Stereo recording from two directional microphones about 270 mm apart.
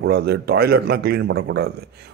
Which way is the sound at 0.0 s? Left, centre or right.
Right.